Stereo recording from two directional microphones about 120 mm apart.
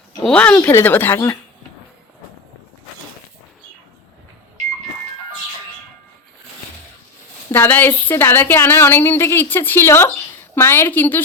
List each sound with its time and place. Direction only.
0.2 s speech: 10° left (ahead or behind)
7.5 s a woman's voice: 15° left (ahead or behind)